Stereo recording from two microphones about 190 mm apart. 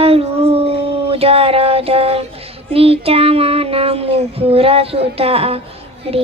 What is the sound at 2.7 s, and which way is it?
Speech, 30° right (ahead or behind).